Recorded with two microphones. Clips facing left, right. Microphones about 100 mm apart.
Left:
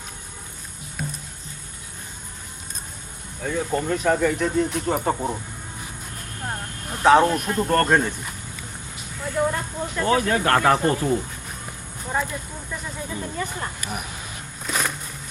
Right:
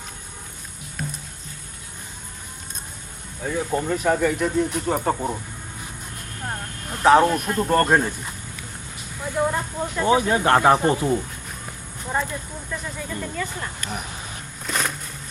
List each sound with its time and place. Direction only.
3.4 s speech: 5° right (ahead or behind)
6.4 s speech: centre (ahead or behind)
9.2 s speech: 10° right (ahead or behind)
12.0 s speech: centre (ahead or behind)
12.3 s speech: 10° left (ahead or behind)
13.2 s speech: 25° left (ahead or behind)
13.8 s speech: 5° left (ahead or behind)
14.7 s a sound: 5° left (ahead or behind)